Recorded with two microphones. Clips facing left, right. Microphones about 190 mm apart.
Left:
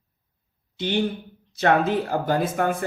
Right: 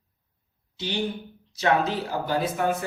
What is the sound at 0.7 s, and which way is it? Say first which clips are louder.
Speech: left 5 dB; 55° left (ahead or behind).